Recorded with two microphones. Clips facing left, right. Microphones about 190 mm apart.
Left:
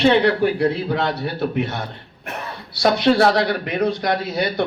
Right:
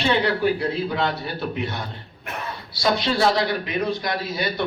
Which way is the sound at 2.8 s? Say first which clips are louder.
Left 5 dB; 60° left (ahead or behind).